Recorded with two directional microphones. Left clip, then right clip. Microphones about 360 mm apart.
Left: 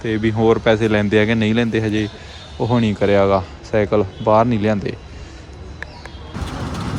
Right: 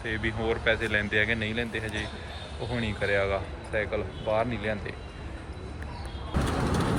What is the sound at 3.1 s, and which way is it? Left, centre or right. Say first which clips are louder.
Speech: left 12 dB; centre.